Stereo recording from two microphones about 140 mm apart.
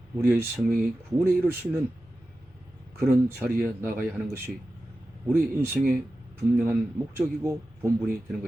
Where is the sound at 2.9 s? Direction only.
20° right (ahead or behind).